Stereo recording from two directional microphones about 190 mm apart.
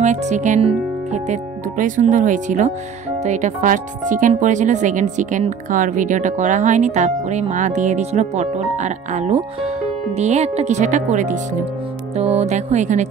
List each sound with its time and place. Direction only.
0.0 s speech: 40° right (ahead or behind)